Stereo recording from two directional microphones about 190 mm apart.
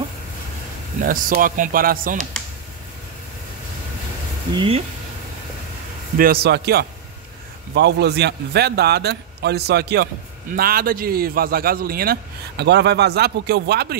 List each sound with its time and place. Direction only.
1.0 s a man's voice: 45° right (ahead or behind)
4.6 s speech: 30° right (ahead or behind)
6.1 s a man's voice: 50° right (ahead or behind)